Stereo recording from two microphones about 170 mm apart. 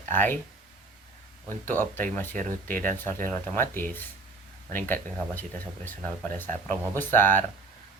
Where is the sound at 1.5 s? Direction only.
10° left (ahead or behind).